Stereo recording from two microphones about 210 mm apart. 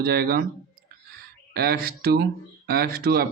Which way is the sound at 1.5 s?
45° right (ahead or behind).